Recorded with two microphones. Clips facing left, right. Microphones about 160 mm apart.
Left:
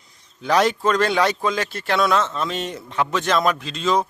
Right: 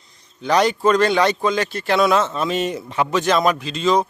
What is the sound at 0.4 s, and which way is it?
A man's voice, centre (ahead or behind).